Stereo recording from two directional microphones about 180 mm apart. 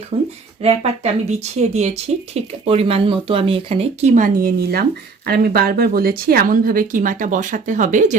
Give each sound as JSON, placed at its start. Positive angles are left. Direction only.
{"t": 0.1, "sound": "speech", "side_deg": -35}